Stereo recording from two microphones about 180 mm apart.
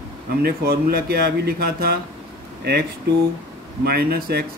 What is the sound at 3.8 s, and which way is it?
Speech, 60° right (ahead or behind).